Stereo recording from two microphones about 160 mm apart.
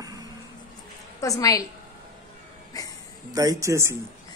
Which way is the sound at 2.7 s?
20° left (ahead or behind).